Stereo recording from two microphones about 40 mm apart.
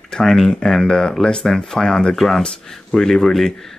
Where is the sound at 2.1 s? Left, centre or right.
Centre.